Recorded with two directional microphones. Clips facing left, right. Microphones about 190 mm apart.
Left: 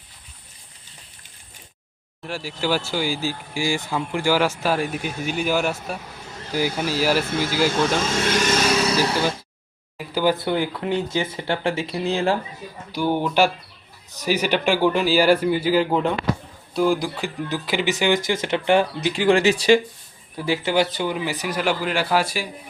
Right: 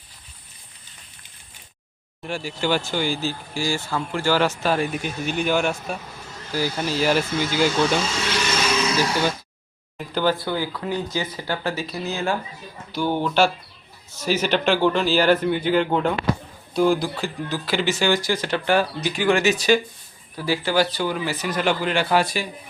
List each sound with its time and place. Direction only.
2.2 s speech: 5° left (ahead or behind)
6.5 s speech: 15° left (ahead or behind)
8.0 s speech: 50° left (ahead or behind)
10.0 s a sound: 10° left (ahead or behind)
10.3 s speech: 20° left (ahead or behind)
12.9 s a man's voice: 10° left (ahead or behind)
17.0 s speech: 15° left (ahead or behind)